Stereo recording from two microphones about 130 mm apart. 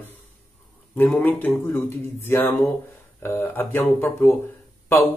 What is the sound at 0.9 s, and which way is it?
Speech, 15° left (ahead or behind).